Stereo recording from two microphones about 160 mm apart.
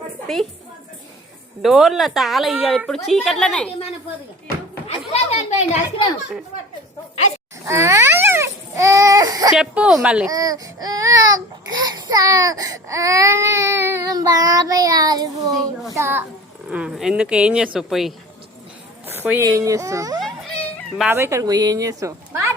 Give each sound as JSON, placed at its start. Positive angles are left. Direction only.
{"t": 0.3, "sound": "speech", "side_deg": 0}
{"t": 1.6, "sound": "speech", "side_deg": 0}
{"t": 4.9, "sound": "a sound", "side_deg": 40}
{"t": 7.7, "sound": "baby cry", "side_deg": -20}
{"t": 9.6, "sound": "speech", "side_deg": -5}
{"t": 10.3, "sound": "speech", "side_deg": -25}
{"t": 16.0, "sound": "a child's voice", "side_deg": -15}
{"t": 19.0, "sound": "speech", "side_deg": -15}
{"t": 20.1, "sound": "music", "side_deg": 0}
{"t": 20.9, "sound": "speech", "side_deg": -5}
{"t": 21.2, "sound": "speech", "side_deg": -20}